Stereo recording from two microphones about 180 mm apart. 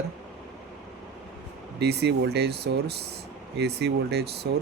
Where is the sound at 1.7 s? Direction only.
65° right (ahead or behind).